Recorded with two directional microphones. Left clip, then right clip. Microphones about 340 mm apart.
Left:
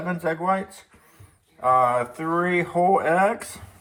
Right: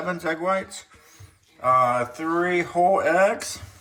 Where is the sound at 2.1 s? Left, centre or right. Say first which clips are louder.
Even; centre.